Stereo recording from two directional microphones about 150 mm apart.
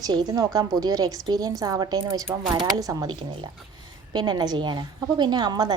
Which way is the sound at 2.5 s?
25° right (ahead or behind).